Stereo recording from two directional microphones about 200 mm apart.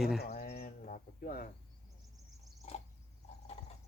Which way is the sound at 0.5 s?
40° left (ahead or behind).